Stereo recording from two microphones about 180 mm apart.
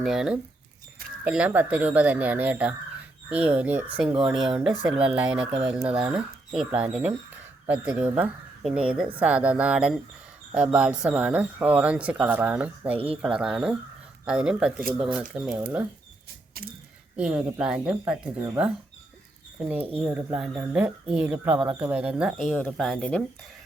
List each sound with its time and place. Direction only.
0.0 s speech: centre (ahead or behind)
16.6 s speech: 55° right (ahead or behind)
17.2 s speech: 5° right (ahead or behind)